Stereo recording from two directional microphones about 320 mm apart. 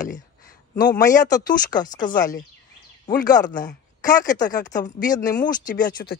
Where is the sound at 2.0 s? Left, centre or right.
Left.